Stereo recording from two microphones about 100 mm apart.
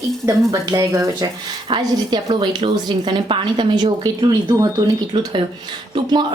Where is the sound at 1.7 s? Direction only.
50° right (ahead or behind).